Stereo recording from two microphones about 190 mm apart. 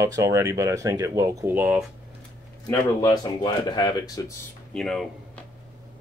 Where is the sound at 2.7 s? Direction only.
20° left (ahead or behind).